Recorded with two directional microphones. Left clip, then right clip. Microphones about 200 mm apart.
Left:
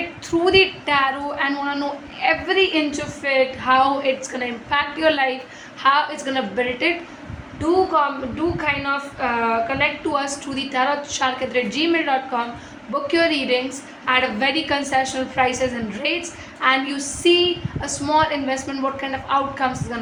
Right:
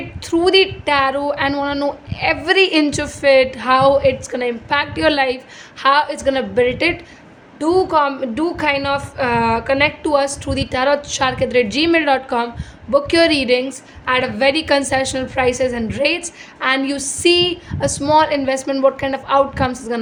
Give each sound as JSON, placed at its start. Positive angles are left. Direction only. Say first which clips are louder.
{"t": 0.3, "sound": "a woman's voice", "louder": "right 3 dB", "side_deg": -55}